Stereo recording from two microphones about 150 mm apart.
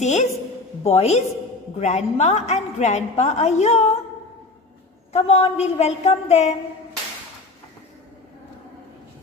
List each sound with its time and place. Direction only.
0.0 s a woman's voice: 50° left (ahead or behind)
5.1 s a woman's voice: 45° left (ahead or behind)